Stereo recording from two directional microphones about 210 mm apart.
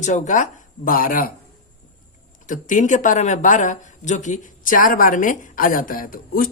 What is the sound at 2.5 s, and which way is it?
A man's voice, 35° left (ahead or behind).